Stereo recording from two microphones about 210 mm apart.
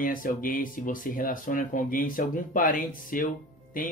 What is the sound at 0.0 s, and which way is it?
Speech, 40° left (ahead or behind).